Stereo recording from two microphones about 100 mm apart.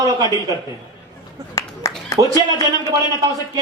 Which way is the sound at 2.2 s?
50° right (ahead or behind).